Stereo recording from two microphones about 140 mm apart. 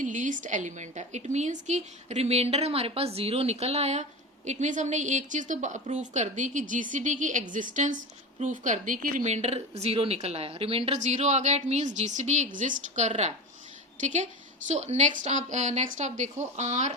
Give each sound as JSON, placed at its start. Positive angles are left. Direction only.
{"t": 0.0, "sound": "a woman's voice", "side_deg": -65}